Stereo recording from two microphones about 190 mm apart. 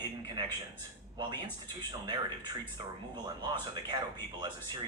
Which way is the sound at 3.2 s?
20° right (ahead or behind).